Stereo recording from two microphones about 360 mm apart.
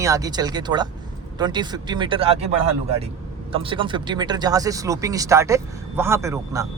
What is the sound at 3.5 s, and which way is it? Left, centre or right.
Speech, centre.